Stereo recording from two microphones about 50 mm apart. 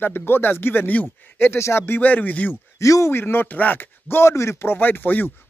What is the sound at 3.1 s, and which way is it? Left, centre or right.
Speech, left.